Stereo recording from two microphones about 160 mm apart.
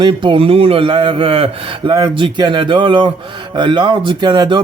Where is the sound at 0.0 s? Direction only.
30° right (ahead or behind).